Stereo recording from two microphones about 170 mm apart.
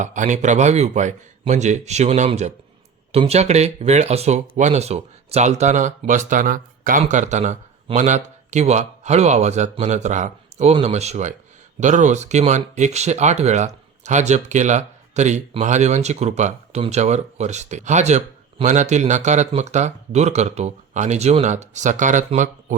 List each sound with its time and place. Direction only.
0.0 s speech: 45° right (ahead or behind)